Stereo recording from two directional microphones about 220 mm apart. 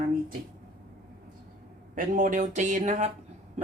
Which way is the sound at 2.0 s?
35° right (ahead or behind).